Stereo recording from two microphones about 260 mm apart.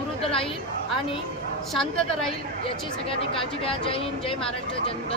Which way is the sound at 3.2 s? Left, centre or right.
Left.